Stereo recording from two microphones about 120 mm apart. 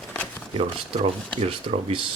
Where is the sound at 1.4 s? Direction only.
50° right (ahead or behind).